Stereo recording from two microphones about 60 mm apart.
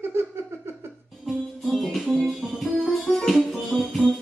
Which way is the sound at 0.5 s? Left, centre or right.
Right.